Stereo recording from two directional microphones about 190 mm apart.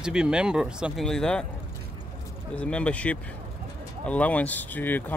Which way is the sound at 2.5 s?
5° left (ahead or behind).